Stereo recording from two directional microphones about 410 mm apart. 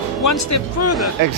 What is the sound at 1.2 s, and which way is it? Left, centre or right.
Speech, right.